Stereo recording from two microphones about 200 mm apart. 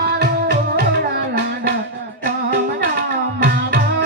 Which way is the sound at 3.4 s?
55° right (ahead or behind).